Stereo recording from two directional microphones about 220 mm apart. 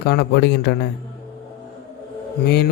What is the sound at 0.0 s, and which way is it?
Speech, 50° left (ahead or behind).